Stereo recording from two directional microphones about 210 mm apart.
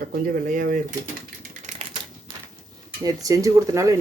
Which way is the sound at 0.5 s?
40° right (ahead or behind).